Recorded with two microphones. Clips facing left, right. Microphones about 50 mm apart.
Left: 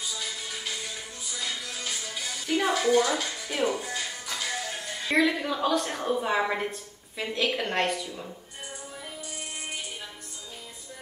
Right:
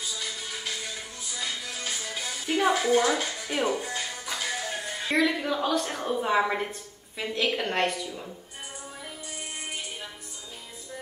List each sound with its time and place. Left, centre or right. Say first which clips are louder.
0.0 s music: even; centre
2.8 s speech: even; centre
4.0 s music: right 1 dB; centre
5.1 s a woman's voice: left 1 dB; centre
9.0 s music: right 1 dB; centre